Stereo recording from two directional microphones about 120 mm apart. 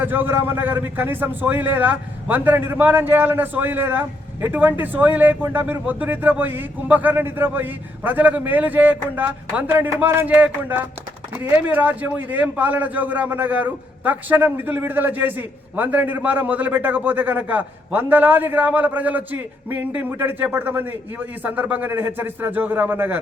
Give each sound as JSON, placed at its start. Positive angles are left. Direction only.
{"t": 0.0, "sound": "a man's voice", "side_deg": -15}